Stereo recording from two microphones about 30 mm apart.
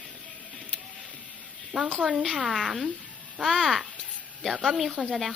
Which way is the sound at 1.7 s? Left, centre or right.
Right.